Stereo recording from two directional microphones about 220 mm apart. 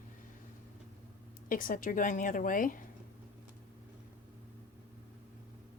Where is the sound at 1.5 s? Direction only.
40° left (ahead or behind).